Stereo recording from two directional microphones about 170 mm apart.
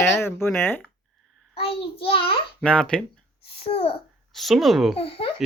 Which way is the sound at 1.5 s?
35° left (ahead or behind).